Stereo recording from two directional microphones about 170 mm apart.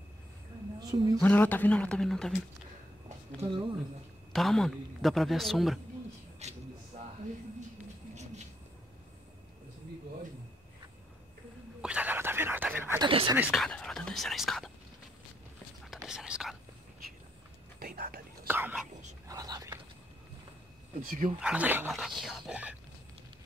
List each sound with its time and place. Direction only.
0.7 s a woman's voice: 25° right (ahead or behind)
1.2 s speech: 10° left (ahead or behind)
3.3 s a woman's voice: 30° right (ahead or behind)
4.3 s a man's voice: centre (ahead or behind)
6.4 s a sound: 40° right (ahead or behind)
11.8 s a sound: 10° right (ahead or behind)
13.0 s speech: 30° right (ahead or behind)
13.4 s speech: centre (ahead or behind)
15.8 s whispering: centre (ahead or behind)
17.7 s whispering: 65° right (ahead or behind)
18.5 s whispering: 10° right (ahead or behind)
21.4 s speech: 5° right (ahead or behind)
21.9 s speech: centre (ahead or behind)